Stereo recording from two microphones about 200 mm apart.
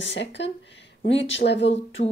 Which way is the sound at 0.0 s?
65° left (ahead or behind).